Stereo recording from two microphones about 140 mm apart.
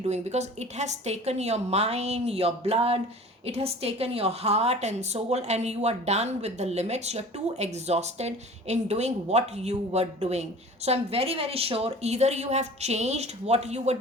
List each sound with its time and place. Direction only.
0.1 s a woman's voice: 55° right (ahead or behind)